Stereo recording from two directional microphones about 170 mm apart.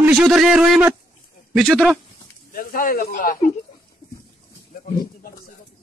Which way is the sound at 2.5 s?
55° left (ahead or behind).